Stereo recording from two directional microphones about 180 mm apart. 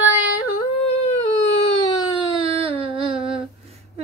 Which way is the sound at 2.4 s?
30° right (ahead or behind).